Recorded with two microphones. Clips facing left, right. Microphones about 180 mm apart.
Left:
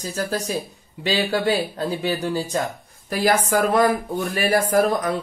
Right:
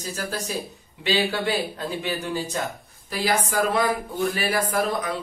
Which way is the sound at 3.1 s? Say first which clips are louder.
Left 5 dB; 50° left (ahead or behind).